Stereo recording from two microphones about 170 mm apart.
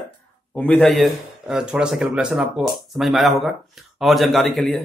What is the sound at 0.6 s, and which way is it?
Speech, 10° left (ahead or behind).